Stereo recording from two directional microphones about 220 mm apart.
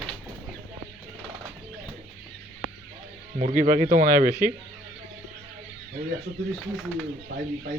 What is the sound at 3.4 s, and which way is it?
A man's voice, 35° right (ahead or behind).